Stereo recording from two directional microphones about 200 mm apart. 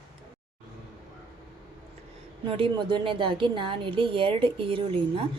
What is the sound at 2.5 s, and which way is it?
A woman's voice, 25° right (ahead or behind).